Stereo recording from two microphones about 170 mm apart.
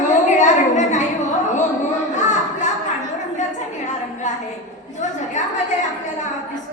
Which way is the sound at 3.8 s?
45° left (ahead or behind).